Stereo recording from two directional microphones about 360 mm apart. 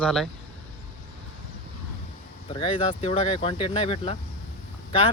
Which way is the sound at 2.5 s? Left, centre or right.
Centre.